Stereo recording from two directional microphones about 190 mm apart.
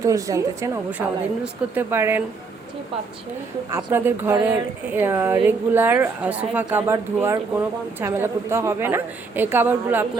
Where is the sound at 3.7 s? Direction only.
15° right (ahead or behind).